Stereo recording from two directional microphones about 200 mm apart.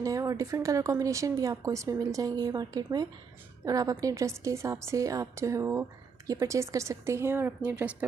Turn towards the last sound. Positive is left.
turn(degrees=-5)  # may be behind; listen again after turning